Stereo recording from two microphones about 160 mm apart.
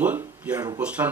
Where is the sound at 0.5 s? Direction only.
25° right (ahead or behind).